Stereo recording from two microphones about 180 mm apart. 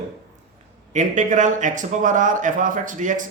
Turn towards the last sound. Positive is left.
turn(degrees=-45)  # may be behind; listen again after turning